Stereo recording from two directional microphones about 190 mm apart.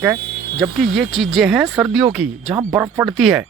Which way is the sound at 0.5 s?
Centre (ahead or behind).